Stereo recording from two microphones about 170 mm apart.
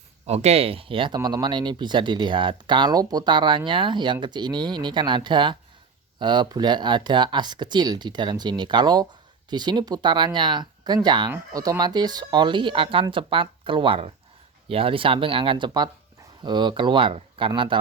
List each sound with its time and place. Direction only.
0.3 s speech: 40° right (ahead or behind)